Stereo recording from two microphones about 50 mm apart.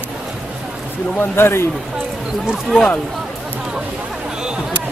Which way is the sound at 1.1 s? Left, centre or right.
Left.